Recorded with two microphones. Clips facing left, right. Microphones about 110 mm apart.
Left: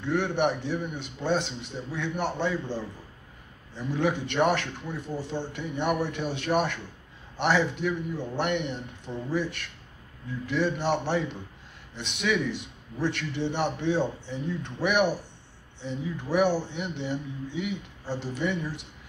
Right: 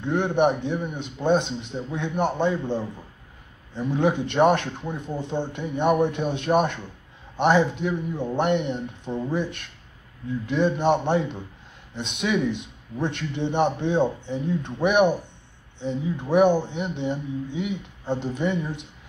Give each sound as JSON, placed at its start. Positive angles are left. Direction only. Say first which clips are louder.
{"t": 0.0, "sound": "speech", "louder": "right 4 dB", "side_deg": -20}